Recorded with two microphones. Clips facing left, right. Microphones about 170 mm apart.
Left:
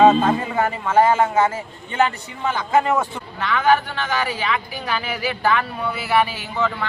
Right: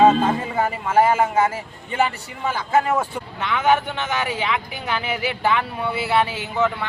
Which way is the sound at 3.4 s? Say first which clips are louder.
Left 1 dB; 20° right (ahead or behind).